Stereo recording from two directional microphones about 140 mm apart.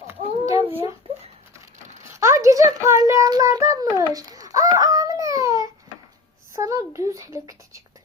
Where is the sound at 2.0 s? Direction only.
20° right (ahead or behind).